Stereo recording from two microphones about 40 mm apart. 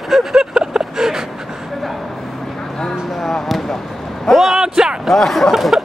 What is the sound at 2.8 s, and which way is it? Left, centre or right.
Speech, centre.